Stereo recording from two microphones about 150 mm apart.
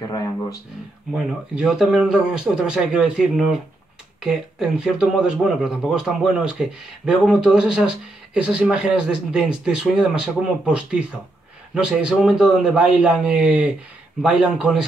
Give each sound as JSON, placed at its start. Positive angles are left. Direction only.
{"t": 0.1, "sound": "speech", "side_deg": 25}
{"t": 1.1, "sound": "speech", "side_deg": -5}